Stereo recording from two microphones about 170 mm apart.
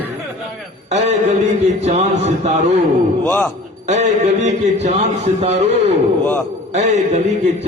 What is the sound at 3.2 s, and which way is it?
Speech, 5° left (ahead or behind).